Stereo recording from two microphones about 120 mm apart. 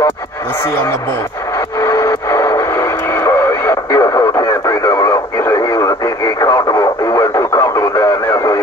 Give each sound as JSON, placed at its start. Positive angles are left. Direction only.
{"t": 1.8, "sound": "radio", "side_deg": 25}